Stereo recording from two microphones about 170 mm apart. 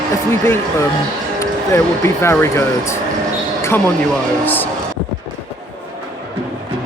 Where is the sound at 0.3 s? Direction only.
15° left (ahead or behind).